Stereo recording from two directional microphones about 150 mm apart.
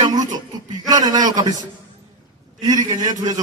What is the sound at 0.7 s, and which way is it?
Speech, 25° right (ahead or behind).